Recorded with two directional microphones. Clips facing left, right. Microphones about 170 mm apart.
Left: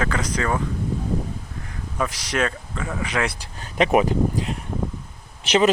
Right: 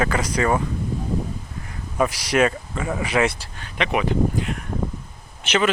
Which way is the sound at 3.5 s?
40° left (ahead or behind).